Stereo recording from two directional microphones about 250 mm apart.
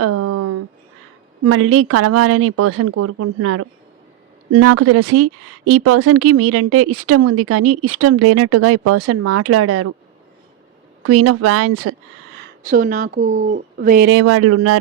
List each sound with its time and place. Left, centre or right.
0.0 s a sound: right
1.5 s speech: right
4.5 s speech: right
11.0 s speech: right
12.4 s speech: right
14.1 s speech: right